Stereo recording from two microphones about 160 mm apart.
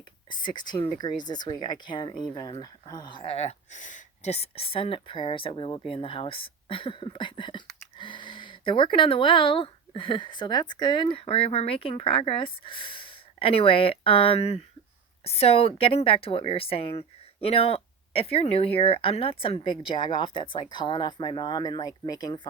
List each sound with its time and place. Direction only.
0.3 s a woman's voice: 30° left (ahead or behind)